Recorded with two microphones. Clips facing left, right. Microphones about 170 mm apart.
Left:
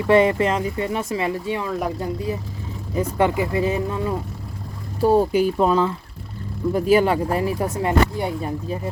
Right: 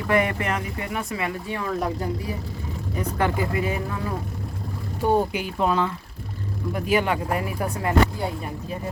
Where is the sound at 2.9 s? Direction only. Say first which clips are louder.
Left 5 dB; 25° left (ahead or behind).